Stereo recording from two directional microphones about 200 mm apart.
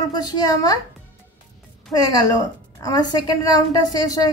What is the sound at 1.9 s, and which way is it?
A woman's voice, 20° left (ahead or behind).